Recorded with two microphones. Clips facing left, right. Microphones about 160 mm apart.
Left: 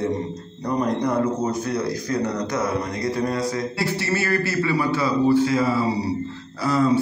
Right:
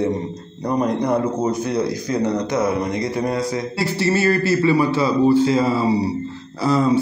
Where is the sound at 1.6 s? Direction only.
20° right (ahead or behind).